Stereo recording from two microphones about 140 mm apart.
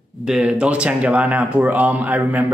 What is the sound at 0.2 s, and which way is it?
Speech, 5° right (ahead or behind).